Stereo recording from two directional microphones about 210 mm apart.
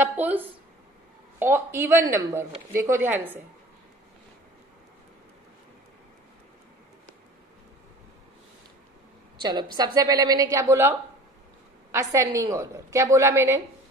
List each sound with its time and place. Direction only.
0.0 s a woman's voice: 10° right (ahead or behind)
9.4 s a woman's voice: 20° right (ahead or behind)